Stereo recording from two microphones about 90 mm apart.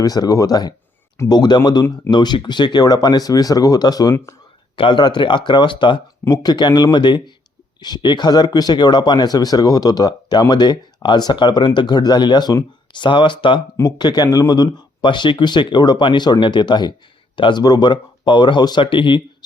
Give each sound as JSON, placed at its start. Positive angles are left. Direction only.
{"t": 0.0, "sound": "speech", "side_deg": 40}
{"t": 4.8, "sound": "speech", "side_deg": 60}
{"t": 6.3, "sound": "speech", "side_deg": 50}
{"t": 14.0, "sound": "speech", "side_deg": 50}
{"t": 17.6, "sound": "speech", "side_deg": 50}